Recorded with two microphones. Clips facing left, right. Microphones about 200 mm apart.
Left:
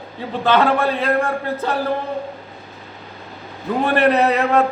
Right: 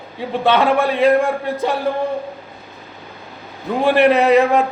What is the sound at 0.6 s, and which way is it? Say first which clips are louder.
Speech: right 4 dB; 10° right (ahead or behind).